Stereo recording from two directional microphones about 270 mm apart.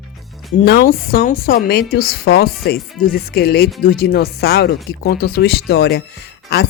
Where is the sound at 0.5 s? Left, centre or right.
Left.